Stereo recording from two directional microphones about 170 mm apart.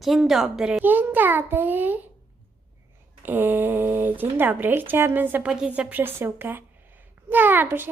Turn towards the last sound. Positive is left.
turn(degrees=-10)  # may be behind; listen again after turning